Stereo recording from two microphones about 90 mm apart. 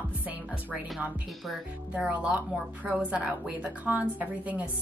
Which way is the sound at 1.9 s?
15° right (ahead or behind).